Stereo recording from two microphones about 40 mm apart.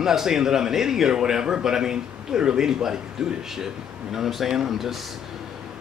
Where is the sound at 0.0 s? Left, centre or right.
Centre.